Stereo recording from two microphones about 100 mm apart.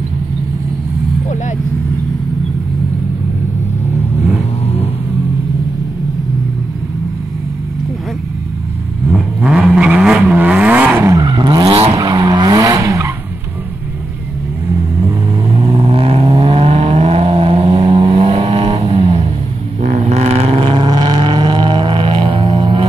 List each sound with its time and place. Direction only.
9.1 s vehicle: 10° right (ahead or behind)
11.1 s vehicle: 40° right (ahead or behind)
11.6 s vehicle: 70° right (ahead or behind)
12.0 s vehicle: 40° right (ahead or behind)
15.6 s vehicle: 70° right (ahead or behind)
20.1 s vehicle: 90° right; by 22.8 s 60° right (ahead or behind)